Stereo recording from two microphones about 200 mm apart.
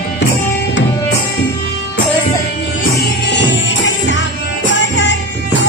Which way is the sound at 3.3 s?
60° left (ahead or behind).